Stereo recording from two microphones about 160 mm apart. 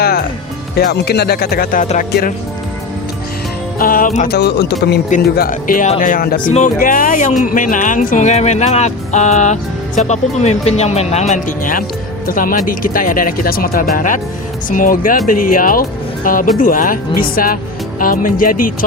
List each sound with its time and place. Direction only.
0.0 s music: 75° left (ahead or behind)
0.8 s music: 90° left; by 1.9 s 65° left (ahead or behind)
1.9 s speech: 60° left (ahead or behind)
3.8 s music: 65° left (ahead or behind); by 4.9 s 90° left
5.2 s speech: 65° left (ahead or behind)
13.9 s speech: 55° left (ahead or behind)